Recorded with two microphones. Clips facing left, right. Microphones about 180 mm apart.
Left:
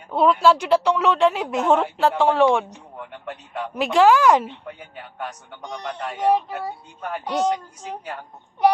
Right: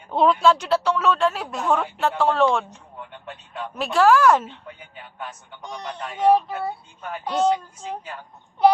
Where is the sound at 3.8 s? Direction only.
20° left (ahead or behind).